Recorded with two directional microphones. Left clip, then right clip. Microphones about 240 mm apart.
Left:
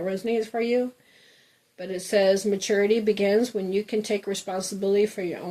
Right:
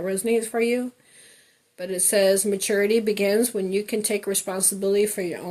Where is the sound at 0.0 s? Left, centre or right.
Right.